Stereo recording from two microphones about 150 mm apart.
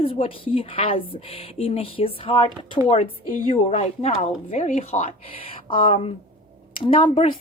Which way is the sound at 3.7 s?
45° left (ahead or behind).